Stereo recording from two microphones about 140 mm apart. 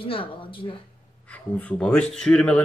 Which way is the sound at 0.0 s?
40° left (ahead or behind).